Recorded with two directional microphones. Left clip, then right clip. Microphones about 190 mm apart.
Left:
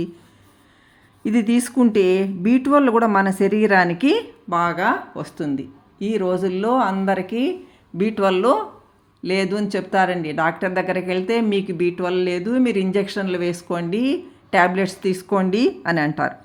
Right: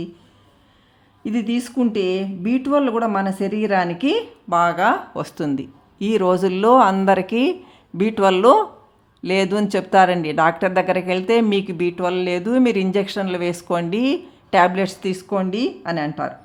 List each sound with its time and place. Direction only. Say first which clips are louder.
1.2 s speech: left 4 dB; 10° left (ahead or behind)
4.4 s a woman's voice: right 3 dB; 10° right (ahead or behind); by 16.3 s 5° left (ahead or behind)